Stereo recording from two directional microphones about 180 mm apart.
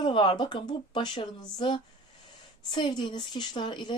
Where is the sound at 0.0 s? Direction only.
25° left (ahead or behind).